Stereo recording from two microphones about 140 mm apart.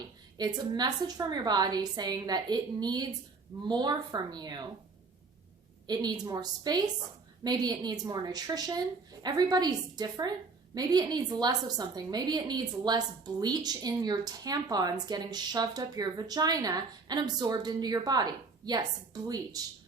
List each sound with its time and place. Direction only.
0.3 s a woman's voice: 30° right (ahead or behind)
5.9 s a woman's voice: 30° right (ahead or behind)